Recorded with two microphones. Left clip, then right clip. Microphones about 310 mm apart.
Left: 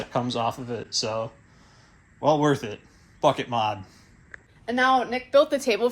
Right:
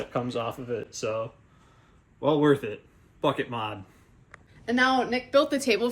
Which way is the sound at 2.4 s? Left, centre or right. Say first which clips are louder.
Right 1 dB; left.